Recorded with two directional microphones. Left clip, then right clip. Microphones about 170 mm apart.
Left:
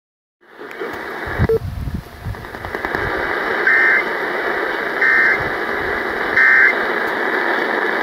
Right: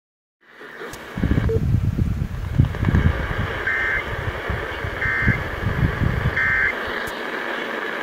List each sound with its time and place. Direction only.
0.7 s vehicle: 35° left (ahead or behind)
2.7 s vehicle: 35° left (ahead or behind)